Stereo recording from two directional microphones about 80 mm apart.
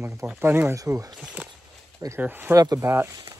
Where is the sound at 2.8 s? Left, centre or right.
Right.